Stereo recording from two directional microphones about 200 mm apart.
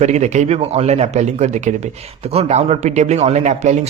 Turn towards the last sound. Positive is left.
turn(degrees=-35)  # may be behind; listen again after turning